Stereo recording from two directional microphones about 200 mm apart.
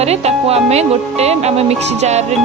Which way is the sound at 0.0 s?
30° right (ahead or behind).